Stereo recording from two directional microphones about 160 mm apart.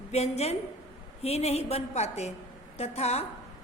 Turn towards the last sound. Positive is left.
turn(degrees=40)  # may be behind; listen again after turning